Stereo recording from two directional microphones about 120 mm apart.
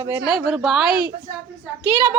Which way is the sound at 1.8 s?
15° right (ahead or behind).